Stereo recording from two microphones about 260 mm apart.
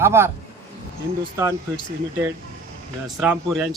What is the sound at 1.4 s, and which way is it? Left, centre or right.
Speech, centre.